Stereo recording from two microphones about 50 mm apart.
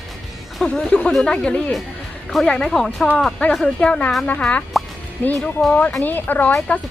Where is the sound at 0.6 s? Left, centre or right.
Centre.